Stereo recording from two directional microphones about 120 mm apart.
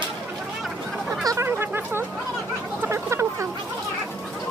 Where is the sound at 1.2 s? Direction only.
25° right (ahead or behind).